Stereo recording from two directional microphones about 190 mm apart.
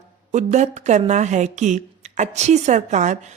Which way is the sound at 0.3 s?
40° right (ahead or behind).